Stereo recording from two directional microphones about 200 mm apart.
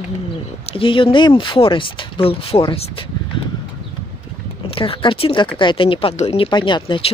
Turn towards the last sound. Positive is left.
turn(degrees=25)  # may be behind; listen again after turning